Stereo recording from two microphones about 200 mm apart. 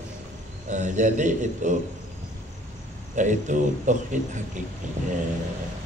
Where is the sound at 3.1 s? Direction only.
40° right (ahead or behind).